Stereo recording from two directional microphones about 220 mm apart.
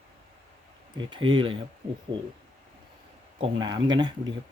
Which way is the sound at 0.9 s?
20° right (ahead or behind).